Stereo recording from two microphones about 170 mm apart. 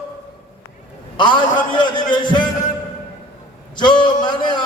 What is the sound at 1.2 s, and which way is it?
A man's voice, 25° left (ahead or behind).